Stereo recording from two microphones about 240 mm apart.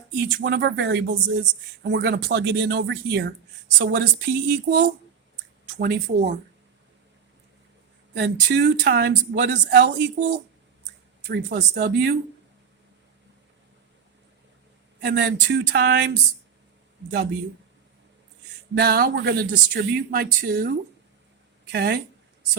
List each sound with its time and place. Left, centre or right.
0.2 s speech: right
8.1 s speech: right
15.0 s speech: right
18.7 s speech: right